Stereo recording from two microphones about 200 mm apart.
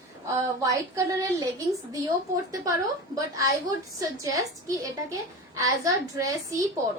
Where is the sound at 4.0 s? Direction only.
15° right (ahead or behind).